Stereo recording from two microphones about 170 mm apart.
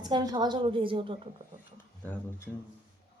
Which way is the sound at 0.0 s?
25° right (ahead or behind).